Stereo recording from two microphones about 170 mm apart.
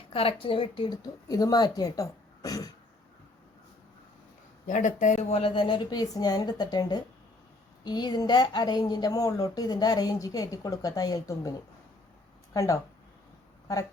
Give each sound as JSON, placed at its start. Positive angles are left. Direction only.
{"t": 0.1, "sound": "a woman's voice", "side_deg": 35}
{"t": 4.6, "sound": "a woman's voice", "side_deg": 50}
{"t": 12.5, "sound": "a woman's voice", "side_deg": 20}